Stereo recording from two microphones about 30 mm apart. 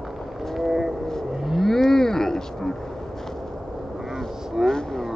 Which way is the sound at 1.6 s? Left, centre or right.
Centre.